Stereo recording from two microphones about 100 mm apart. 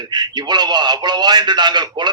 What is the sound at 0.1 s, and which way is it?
A man's voice, 45° right (ahead or behind).